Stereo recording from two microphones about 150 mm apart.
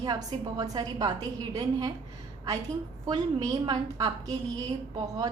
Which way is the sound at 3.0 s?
25° right (ahead or behind).